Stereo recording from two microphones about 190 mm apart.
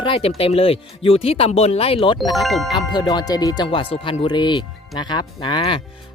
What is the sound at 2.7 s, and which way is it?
Speech, 20° left (ahead or behind).